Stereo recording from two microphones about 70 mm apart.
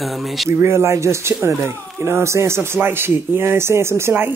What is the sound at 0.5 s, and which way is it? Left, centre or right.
Speech, right.